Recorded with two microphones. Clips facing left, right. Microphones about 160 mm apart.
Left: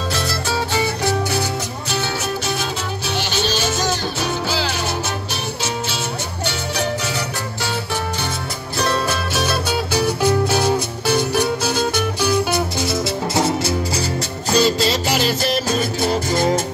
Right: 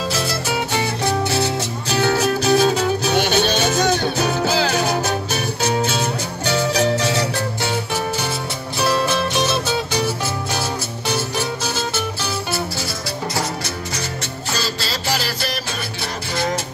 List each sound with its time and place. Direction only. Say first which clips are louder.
2.0 s music: right 7 dB; 40° right (ahead or behind)
3.1 s music: right 2 dB; 60° right (ahead or behind)
8.7 s music: right 2 dB; 5° right (ahead or behind)
9.9 s music: left 5 dB; 15° left (ahead or behind)
14.6 s music: left 11 dB; 20° left (ahead or behind)